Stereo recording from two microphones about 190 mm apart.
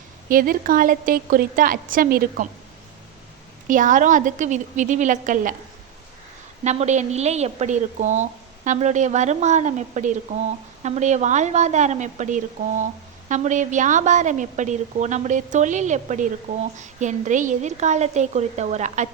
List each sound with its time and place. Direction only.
0.3 s a woman's voice: 45° right (ahead or behind)
3.7 s a woman's voice: 45° right (ahead or behind)
6.7 s a woman's voice: 35° right (ahead or behind)